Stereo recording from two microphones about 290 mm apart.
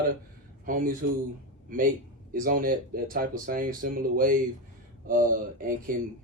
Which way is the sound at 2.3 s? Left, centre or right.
Right.